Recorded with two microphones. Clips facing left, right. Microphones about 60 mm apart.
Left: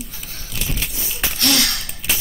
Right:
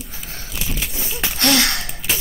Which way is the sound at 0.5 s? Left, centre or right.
Centre.